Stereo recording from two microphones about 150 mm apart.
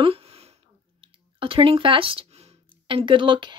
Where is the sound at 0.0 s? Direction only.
40° right (ahead or behind).